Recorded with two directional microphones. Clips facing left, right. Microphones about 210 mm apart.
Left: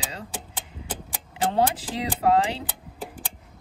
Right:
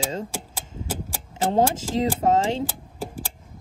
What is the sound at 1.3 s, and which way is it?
Speech, 45° right (ahead or behind).